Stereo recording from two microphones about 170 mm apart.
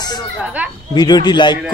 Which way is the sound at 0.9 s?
25° left (ahead or behind).